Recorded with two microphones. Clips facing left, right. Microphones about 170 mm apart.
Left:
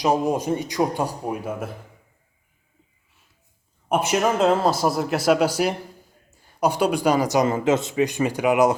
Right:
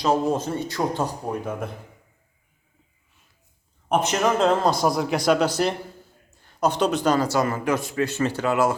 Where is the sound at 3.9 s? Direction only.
10° left (ahead or behind).